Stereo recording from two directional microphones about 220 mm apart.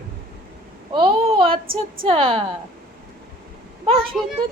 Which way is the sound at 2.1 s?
25° right (ahead or behind).